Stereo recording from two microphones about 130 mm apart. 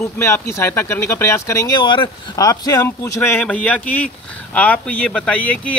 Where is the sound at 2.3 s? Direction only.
25° left (ahead or behind).